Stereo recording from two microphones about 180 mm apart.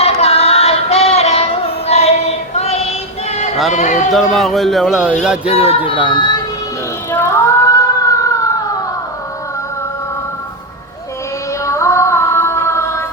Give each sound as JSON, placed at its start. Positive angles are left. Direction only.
{"t": 0.0, "sound": "music", "side_deg": 35}
{"t": 3.7, "sound": "speech", "side_deg": 40}
{"t": 4.1, "sound": "music", "side_deg": 0}
{"t": 5.5, "sound": "speech", "side_deg": 35}
{"t": 7.1, "sound": "a sound", "side_deg": 15}
{"t": 11.6, "sound": "music", "side_deg": 15}